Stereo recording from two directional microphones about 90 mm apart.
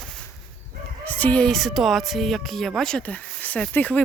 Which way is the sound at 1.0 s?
15° left (ahead or behind).